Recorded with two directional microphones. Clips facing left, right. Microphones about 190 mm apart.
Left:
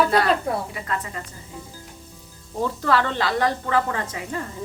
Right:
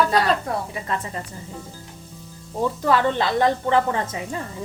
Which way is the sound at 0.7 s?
25° right (ahead or behind).